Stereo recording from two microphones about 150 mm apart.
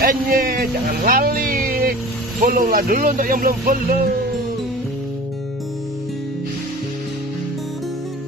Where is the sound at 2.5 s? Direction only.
65° right (ahead or behind).